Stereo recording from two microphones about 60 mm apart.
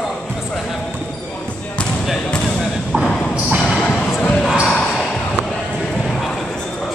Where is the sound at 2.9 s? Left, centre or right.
Centre.